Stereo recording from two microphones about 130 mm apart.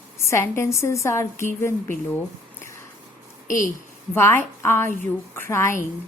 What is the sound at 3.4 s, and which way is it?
Speech, 90° left.